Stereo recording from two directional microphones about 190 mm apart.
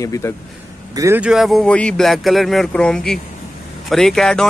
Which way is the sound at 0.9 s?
15° right (ahead or behind).